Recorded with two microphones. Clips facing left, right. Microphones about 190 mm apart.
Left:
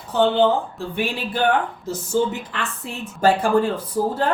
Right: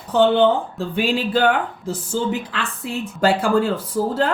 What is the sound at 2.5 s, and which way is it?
A woman's voice, 90° right.